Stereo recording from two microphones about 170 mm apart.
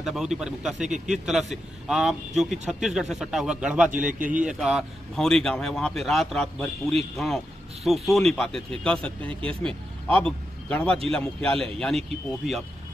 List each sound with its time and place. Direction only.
0.0 s speech: 5° right (ahead or behind)
4.1 s speech: 50° right (ahead or behind)
4.4 s speech: 5° right (ahead or behind)